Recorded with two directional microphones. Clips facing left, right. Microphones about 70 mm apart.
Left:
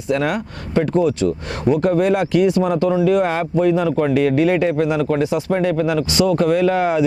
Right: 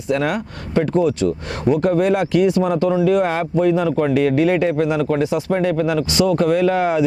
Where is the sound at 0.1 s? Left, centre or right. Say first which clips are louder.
Even; centre.